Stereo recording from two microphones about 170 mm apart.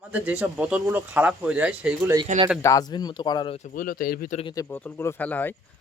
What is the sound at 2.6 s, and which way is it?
Speech, 20° left (ahead or behind).